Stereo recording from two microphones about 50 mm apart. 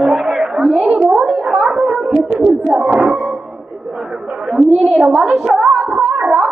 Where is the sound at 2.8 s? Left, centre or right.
Centre.